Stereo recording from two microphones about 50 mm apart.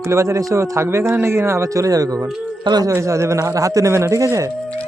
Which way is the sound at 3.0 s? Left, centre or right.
Right.